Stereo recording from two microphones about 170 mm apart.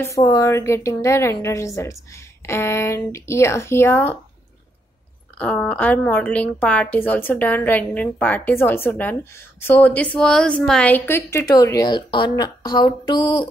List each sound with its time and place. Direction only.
0.0 s a woman's voice: 20° left (ahead or behind)
5.4 s a woman's voice: 5° left (ahead or behind); by 13.5 s 25° left (ahead or behind)